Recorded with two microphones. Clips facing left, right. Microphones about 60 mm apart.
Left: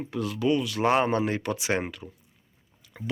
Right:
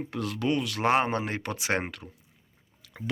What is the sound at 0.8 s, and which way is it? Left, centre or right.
Speech, right.